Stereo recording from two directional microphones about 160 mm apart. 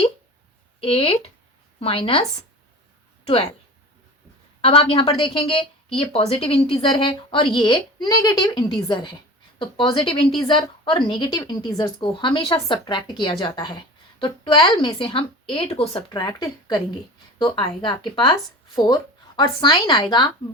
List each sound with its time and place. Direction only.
0.8 s a woman's voice: 35° left (ahead or behind)
4.6 s a woman's voice: 35° left (ahead or behind)